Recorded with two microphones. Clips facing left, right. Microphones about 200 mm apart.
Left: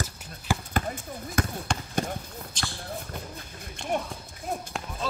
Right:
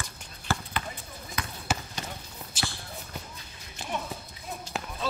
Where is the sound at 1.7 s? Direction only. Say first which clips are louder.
Left 2 dB; 5° right (ahead or behind).